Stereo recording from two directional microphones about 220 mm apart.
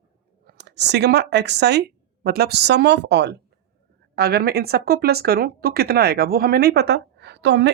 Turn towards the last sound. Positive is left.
turn(degrees=-50)  # may be behind; listen again after turning